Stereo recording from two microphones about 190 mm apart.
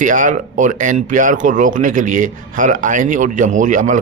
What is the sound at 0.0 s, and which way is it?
Speech, 45° right (ahead or behind).